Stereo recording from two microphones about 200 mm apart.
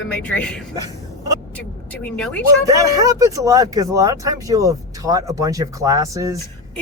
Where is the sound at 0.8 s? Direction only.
15° right (ahead or behind).